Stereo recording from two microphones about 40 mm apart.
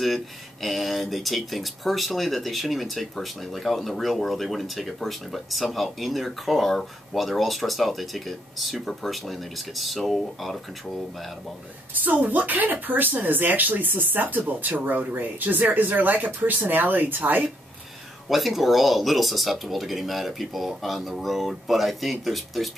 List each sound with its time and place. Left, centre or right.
0.0 s speech: centre
11.9 s speech: right
18.3 s speech: centre